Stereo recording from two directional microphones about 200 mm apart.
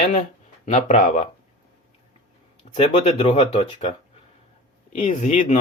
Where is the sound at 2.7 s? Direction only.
30° left (ahead or behind).